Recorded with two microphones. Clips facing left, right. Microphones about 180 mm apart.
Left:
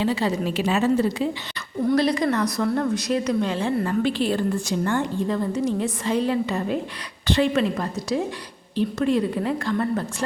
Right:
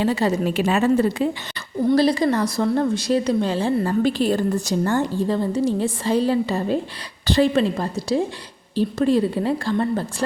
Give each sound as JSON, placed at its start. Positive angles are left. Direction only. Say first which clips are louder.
{"t": 0.0, "sound": "a woman's voice", "louder": "right 3 dB", "side_deg": -45}
{"t": 1.9, "sound": "a woman's voice", "louder": "right 3 dB", "side_deg": -30}